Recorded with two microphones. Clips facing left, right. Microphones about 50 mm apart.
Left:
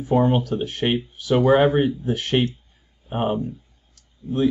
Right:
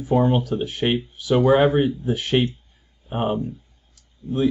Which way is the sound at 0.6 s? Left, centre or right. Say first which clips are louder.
Even; centre.